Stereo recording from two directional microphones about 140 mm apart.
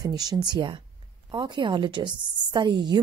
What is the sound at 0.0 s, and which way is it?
A woman's voice, 30° right (ahead or behind).